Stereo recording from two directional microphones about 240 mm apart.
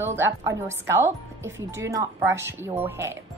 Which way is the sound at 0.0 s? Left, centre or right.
Centre.